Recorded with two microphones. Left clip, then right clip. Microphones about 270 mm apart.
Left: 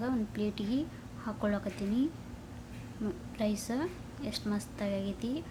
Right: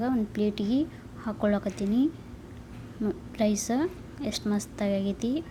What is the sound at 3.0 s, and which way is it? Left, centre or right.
A woman's voice, centre.